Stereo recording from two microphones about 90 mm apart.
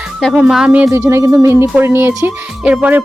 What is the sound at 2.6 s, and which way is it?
Speech, 15° right (ahead or behind).